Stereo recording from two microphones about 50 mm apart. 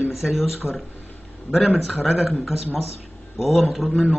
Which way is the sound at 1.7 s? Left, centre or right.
Centre.